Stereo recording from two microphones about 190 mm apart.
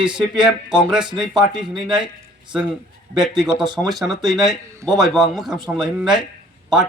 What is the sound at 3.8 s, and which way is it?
Speech, centre (ahead or behind).